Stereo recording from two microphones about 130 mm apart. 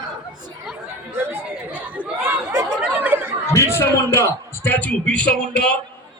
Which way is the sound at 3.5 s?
20° left (ahead or behind).